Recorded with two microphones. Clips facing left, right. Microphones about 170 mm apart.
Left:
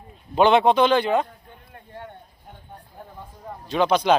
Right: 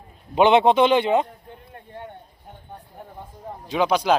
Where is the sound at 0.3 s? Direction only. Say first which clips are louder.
Right 1 dB; 20° right (ahead or behind).